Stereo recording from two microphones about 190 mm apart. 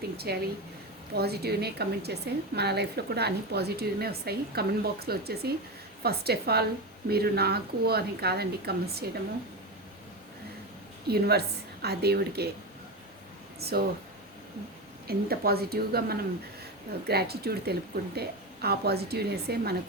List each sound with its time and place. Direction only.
0.3 s a woman's voice: 55° right (ahead or behind)
11.1 s a woman's voice: 55° right (ahead or behind)
13.6 s a woman's voice: 55° right (ahead or behind)
15.0 s a woman's voice: 55° right (ahead or behind)